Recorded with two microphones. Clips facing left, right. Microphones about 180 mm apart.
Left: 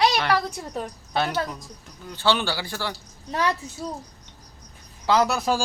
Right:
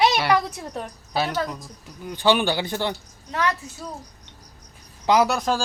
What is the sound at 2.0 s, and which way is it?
Speech, 15° right (ahead or behind).